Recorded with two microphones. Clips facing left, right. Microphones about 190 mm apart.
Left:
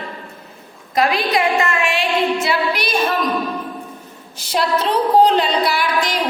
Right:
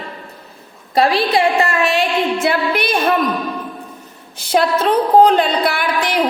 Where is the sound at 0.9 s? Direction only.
30° right (ahead or behind); by 2.9 s 55° right (ahead or behind).